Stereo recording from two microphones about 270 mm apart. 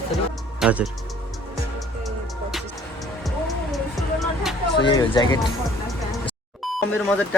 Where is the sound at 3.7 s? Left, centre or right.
Centre.